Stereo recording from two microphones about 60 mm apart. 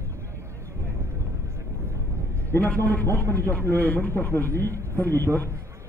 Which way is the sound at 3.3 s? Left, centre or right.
Left.